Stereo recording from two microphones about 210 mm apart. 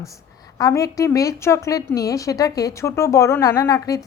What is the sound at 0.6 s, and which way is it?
A woman's voice, 15° left (ahead or behind).